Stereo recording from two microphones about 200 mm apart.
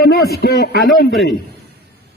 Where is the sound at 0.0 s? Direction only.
50° left (ahead or behind).